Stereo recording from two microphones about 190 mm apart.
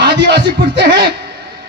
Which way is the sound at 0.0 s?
60° right (ahead or behind).